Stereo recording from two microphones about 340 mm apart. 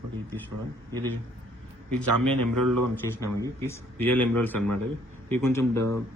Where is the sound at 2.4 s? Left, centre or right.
Right.